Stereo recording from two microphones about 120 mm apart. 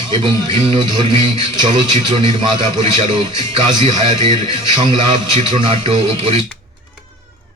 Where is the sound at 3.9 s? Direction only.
60° right (ahead or behind).